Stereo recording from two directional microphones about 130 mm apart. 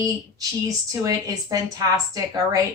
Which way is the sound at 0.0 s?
25° right (ahead or behind).